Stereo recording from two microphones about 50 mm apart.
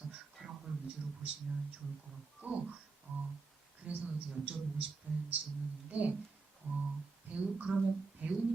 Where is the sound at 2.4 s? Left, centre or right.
Right.